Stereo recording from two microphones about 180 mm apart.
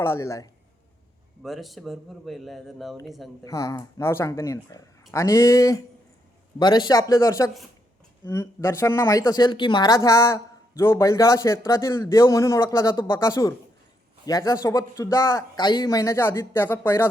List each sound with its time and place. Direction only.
0.0 s speech: 15° left (ahead or behind)
1.4 s speech: centre (ahead or behind)
3.4 s speech: 15° left (ahead or behind)